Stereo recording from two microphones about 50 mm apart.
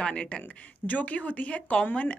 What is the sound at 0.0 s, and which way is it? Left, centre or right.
Speech, centre.